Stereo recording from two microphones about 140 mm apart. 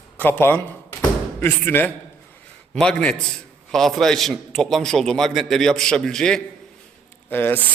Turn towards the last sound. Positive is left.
turn(degrees=15)  # may be behind; listen again after turning